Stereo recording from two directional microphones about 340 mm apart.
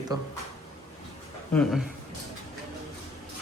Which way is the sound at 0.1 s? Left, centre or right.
Centre.